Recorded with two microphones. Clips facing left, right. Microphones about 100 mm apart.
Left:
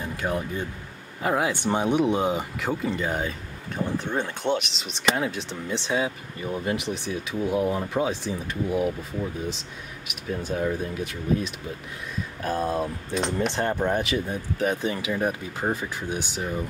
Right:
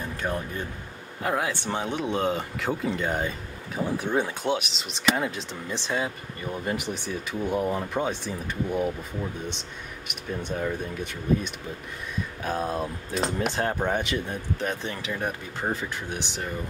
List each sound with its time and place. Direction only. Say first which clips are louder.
0.0 s speech: left 2 dB; 15° left (ahead or behind)
2.7 s speech: even; centre (ahead or behind)
3.8 s speech: right 1 dB; 10° right (ahead or behind); by 16.4 s 10° left (ahead or behind)